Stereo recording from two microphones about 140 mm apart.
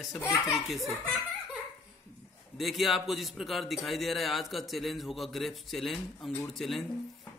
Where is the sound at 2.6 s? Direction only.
Centre (ahead or behind).